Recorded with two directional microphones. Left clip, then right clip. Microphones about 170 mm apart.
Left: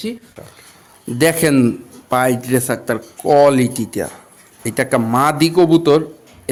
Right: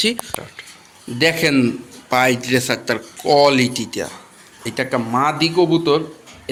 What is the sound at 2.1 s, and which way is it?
A man's voice, 50° left (ahead or behind).